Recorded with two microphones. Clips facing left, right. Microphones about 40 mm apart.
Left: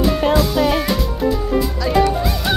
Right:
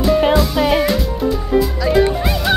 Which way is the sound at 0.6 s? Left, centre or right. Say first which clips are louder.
Right 2 dB; centre.